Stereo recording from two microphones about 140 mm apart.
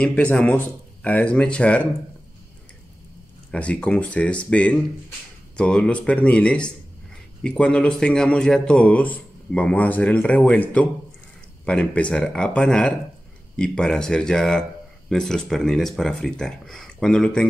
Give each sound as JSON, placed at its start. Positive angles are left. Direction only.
{"t": 0.0, "sound": "speech", "side_deg": 10}
{"t": 3.5, "sound": "speech", "side_deg": 10}